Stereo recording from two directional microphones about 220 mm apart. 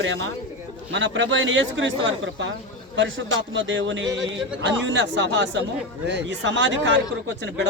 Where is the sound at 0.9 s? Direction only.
60° right (ahead or behind).